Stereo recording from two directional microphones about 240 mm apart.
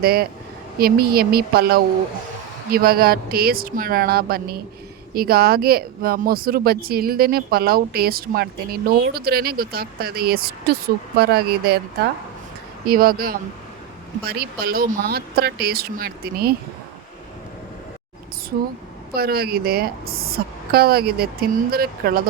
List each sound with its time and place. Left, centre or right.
0.0 s speech: right
12.8 s speech: right
19.1 s speech: right